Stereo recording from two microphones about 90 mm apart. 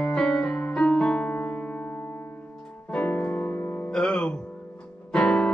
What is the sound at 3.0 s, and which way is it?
Music, 20° left (ahead or behind).